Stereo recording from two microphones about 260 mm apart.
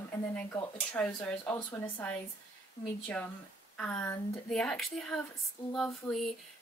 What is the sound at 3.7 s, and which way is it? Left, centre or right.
A woman's voice, centre.